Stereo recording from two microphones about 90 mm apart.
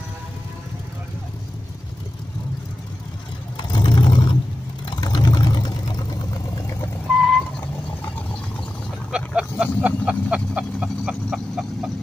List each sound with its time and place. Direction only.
3.5 s vehicle: 60° left (ahead or behind)
7.2 s vehicle: centre (ahead or behind)
9.1 s a sound: 10° right (ahead or behind)